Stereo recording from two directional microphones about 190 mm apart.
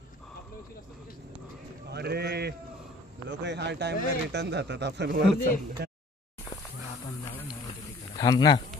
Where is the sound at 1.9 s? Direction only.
60° right (ahead or behind).